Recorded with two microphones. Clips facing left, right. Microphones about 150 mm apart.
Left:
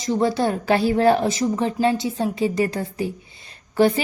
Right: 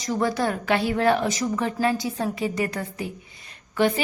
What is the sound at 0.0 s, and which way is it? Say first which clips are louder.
A woman's voice: left 4 dB; 30° left (ahead or behind).